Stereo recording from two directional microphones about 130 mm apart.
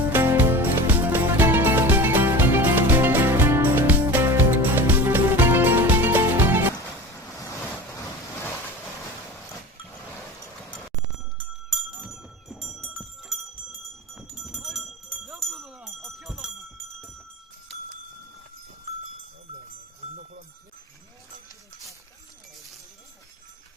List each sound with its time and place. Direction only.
0.1 s music: 15° right (ahead or behind)
7.9 s a sound: 20° left (ahead or behind)
11.3 s jingle bell: centre (ahead or behind)